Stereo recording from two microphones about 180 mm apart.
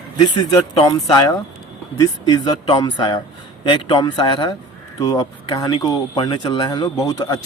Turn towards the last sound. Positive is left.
turn(degrees=20)  # may be behind; listen again after turning